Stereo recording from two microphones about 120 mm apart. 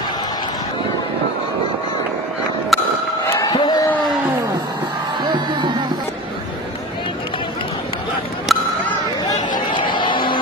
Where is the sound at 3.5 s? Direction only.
35° left (ahead or behind).